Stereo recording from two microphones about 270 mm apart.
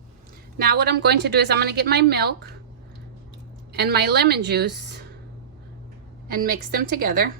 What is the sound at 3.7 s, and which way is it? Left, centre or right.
A woman's voice, right.